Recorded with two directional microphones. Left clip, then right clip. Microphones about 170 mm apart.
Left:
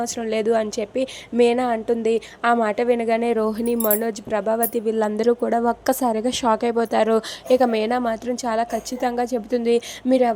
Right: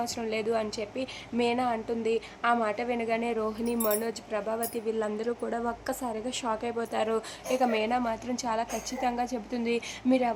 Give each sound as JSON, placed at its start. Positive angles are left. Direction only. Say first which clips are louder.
{"t": 0.0, "sound": "a woman's voice", "louder": "left 8 dB", "side_deg": 30}